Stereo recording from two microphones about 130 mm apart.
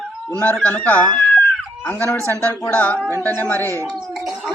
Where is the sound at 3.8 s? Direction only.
Centre (ahead or behind).